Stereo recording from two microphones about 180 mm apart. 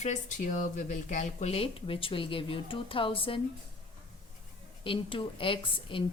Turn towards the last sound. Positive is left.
turn(degrees=30)  # may be behind; listen again after turning